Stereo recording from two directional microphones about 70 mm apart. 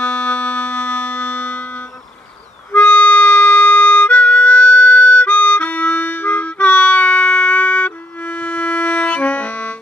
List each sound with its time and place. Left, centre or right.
0.0 s music: centre